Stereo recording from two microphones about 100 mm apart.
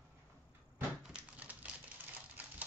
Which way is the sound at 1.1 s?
15° right (ahead or behind).